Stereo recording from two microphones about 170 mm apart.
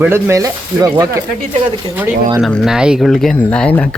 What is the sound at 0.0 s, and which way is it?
Speech, 15° right (ahead or behind).